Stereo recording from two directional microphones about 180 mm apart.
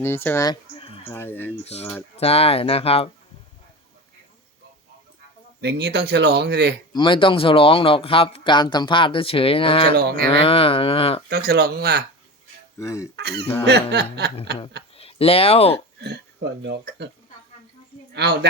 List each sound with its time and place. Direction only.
0.0 s speech: 10° left (ahead or behind)
1.1 s speech: 10° left (ahead or behind)
2.1 s speech: 35° left (ahead or behind)
5.5 s speech: 65° right (ahead or behind)
6.9 s speech: 25° left (ahead or behind)
9.9 s speech: 60° right (ahead or behind)
10.2 s speech: 30° left (ahead or behind)
11.3 s speech: 60° right (ahead or behind)
12.8 s speech: 15° left (ahead or behind)
13.1 s speech: 65° right (ahead or behind)
14.9 s speech: 35° left (ahead or behind)
16.0 s speech: 65° right (ahead or behind)
18.1 s speech: 70° right (ahead or behind)